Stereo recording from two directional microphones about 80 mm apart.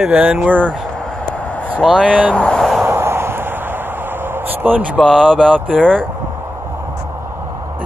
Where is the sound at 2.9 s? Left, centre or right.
Right.